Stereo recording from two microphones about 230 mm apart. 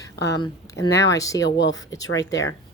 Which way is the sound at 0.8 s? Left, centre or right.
Left.